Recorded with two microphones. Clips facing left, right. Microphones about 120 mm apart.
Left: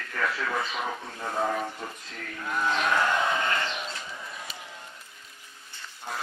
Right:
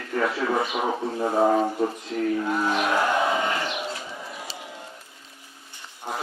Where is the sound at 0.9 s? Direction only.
30° right (ahead or behind).